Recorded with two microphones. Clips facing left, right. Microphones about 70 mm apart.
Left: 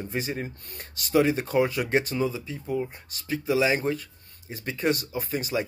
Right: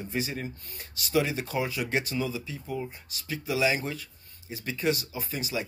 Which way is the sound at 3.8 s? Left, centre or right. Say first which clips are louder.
Left 7 dB; left.